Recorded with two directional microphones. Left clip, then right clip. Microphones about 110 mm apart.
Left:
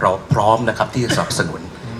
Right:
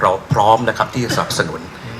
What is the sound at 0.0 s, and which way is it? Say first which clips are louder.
A man's voice: right 2 dB; 15° right (ahead or behind).